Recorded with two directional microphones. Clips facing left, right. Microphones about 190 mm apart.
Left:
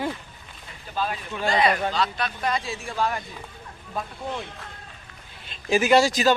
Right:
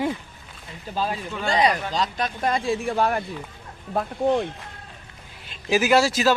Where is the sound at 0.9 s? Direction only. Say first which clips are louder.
Right 2 dB; 30° right (ahead or behind); by 4.4 s 60° right (ahead or behind).